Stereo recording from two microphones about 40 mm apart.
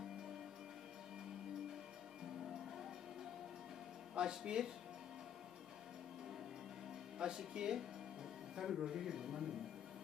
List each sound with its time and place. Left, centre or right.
4.2 s speech: centre
7.2 s speech: centre